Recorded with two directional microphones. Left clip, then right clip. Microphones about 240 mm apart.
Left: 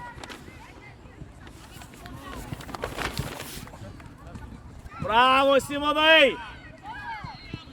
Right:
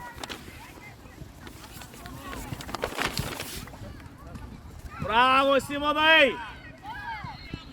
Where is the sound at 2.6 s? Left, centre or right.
Right.